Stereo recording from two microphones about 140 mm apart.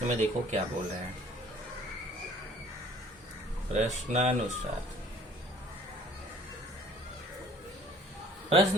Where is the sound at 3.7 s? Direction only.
55° right (ahead or behind).